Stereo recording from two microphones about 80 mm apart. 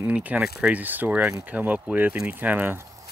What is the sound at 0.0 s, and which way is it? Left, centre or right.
Speech, centre.